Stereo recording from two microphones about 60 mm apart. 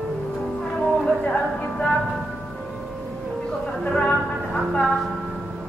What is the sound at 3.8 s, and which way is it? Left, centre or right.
Music, centre.